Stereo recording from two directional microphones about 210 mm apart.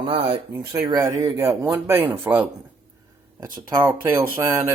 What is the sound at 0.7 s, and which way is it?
Speech, 15° right (ahead or behind).